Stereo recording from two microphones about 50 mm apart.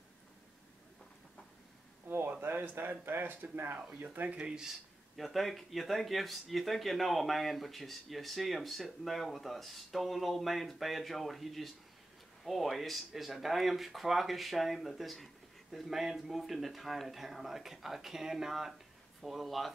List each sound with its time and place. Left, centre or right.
2.0 s a sound: right
2.4 s speech: right
4.4 s speech: centre
5.1 s speech: centre